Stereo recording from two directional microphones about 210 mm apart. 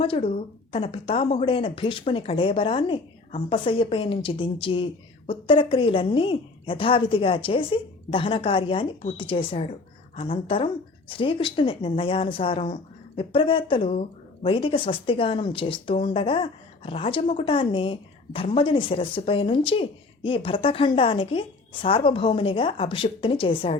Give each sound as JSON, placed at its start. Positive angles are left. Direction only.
{"t": 0.0, "sound": "speech", "side_deg": 25}